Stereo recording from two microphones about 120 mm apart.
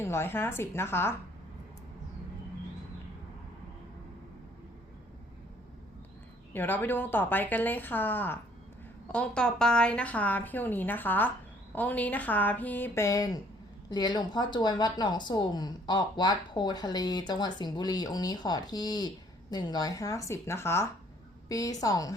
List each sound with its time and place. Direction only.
0.0 s a woman's voice: 20° left (ahead or behind)
6.5 s a woman's voice: 15° left (ahead or behind)